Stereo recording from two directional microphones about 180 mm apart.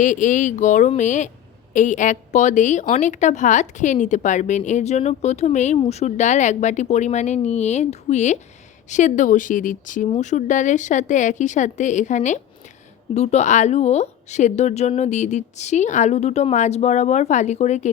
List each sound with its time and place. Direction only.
0.0 s speech: 45° left (ahead or behind)